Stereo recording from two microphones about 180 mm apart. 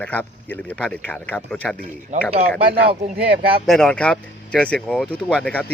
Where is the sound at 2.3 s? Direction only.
30° right (ahead or behind).